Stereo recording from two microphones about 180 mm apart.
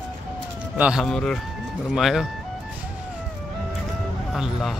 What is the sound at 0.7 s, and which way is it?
Speech, 5° right (ahead or behind).